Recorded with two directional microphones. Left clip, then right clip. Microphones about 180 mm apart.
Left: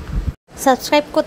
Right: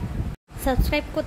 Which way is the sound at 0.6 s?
35° left (ahead or behind).